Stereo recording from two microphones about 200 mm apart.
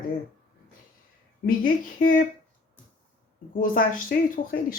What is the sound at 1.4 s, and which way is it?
Speech, 45° left (ahead or behind).